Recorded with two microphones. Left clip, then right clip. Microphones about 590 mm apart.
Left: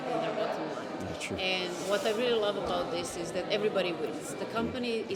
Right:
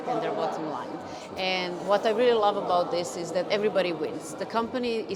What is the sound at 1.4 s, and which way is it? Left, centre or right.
Speech, centre.